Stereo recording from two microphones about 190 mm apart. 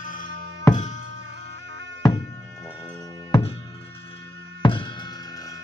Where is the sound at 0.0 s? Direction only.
45° left (ahead or behind).